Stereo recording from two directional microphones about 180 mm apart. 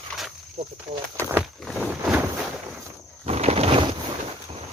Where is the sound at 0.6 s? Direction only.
40° right (ahead or behind).